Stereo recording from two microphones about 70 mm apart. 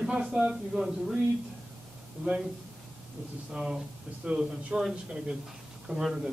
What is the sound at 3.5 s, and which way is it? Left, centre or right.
A man's voice, centre.